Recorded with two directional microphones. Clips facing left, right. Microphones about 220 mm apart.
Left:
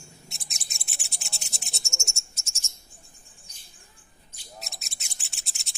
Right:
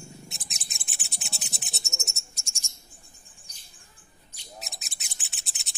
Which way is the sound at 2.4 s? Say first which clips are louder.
Right 1 dB; centre (ahead or behind).